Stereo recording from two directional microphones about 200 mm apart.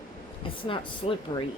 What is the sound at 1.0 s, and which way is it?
Speech, 30° left (ahead or behind).